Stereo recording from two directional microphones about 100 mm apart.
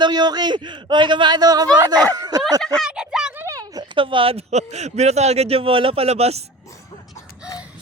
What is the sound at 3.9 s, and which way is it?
A man's voice, 60° right (ahead or behind).